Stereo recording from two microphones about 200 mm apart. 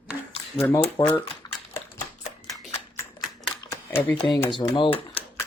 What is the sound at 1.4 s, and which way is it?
Typewriter, 20° left (ahead or behind).